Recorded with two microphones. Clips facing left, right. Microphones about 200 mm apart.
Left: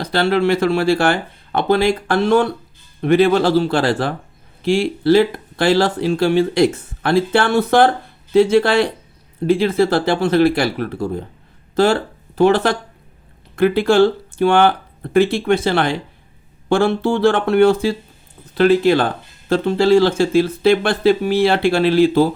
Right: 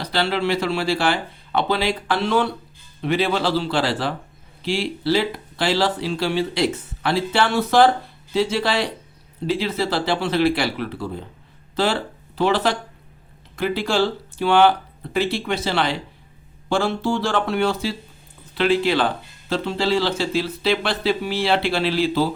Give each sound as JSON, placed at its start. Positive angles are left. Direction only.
{"t": 0.0, "sound": "speech", "side_deg": 50}